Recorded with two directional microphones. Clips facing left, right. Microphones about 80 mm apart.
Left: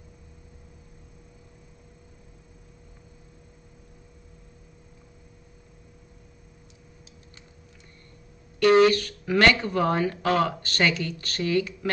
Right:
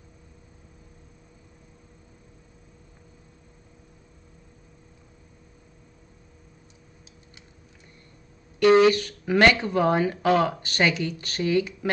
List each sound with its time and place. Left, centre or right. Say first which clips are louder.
8.5 s speech: right 1 dB; centre